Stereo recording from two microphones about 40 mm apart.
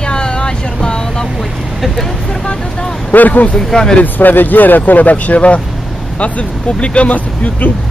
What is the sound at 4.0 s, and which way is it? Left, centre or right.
Speech, left.